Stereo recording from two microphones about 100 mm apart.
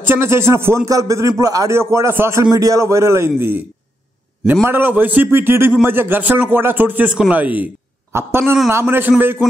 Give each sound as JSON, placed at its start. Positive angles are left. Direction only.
{"t": 0.0, "sound": "a man's voice", "side_deg": -25}
{"t": 4.6, "sound": "a man's voice", "side_deg": -20}